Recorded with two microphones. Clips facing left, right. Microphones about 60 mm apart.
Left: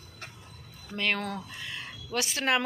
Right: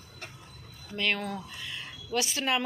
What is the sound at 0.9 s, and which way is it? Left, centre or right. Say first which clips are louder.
Speech: even; left.